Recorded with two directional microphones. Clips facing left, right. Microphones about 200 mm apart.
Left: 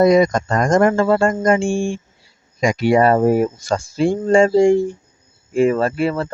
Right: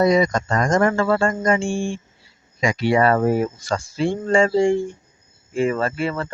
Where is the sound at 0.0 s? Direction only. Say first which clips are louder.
Left 4 dB; 50° left (ahead or behind).